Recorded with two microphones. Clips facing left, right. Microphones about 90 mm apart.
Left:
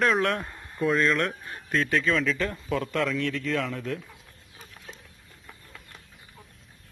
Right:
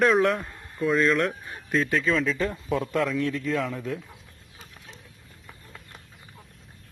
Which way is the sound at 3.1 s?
15° right (ahead or behind).